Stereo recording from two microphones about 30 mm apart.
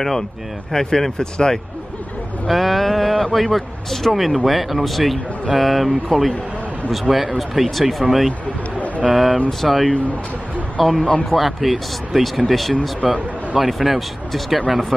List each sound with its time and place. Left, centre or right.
0.7 s speech: centre
2.4 s a sound: centre
3.3 s speech: centre